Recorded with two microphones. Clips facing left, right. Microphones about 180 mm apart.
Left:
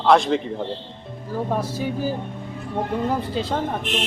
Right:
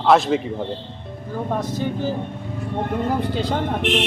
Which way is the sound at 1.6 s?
10° left (ahead or behind).